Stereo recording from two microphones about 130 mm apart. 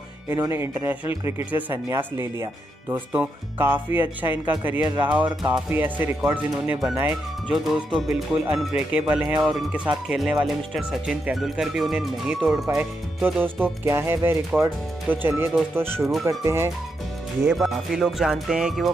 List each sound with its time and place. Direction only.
0.3 s speech: 20° right (ahead or behind); by 12.6 s centre (ahead or behind)
12.7 s speech: 15° right (ahead or behind)
16.0 s speech: centre (ahead or behind)
16.3 s speech: 20° right (ahead or behind)
17.6 s speech: 5° right (ahead or behind)